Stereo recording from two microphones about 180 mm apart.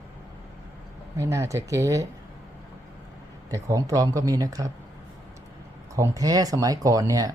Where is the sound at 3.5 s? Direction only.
20° right (ahead or behind).